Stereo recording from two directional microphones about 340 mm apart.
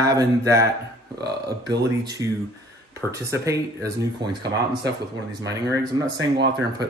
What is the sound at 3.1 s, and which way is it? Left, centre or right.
Speech, centre.